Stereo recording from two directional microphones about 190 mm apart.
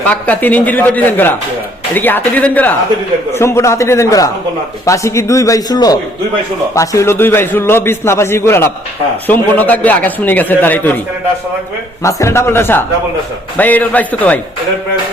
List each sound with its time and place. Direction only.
0.1 s a man's voice: 10° left (ahead or behind)
12.0 s a man's voice: 15° left (ahead or behind)